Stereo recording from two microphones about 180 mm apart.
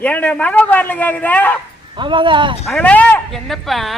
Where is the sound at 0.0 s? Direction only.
5° left (ahead or behind).